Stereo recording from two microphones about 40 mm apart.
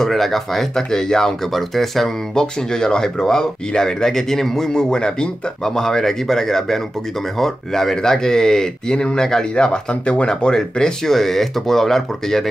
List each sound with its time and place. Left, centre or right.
0.0 s speech: centre
2.3 s speech: centre
10.5 s speech: centre